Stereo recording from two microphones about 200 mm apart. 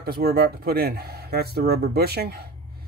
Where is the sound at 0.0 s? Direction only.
50° right (ahead or behind).